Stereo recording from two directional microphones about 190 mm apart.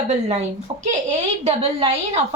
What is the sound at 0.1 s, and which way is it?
Speech, 35° right (ahead or behind).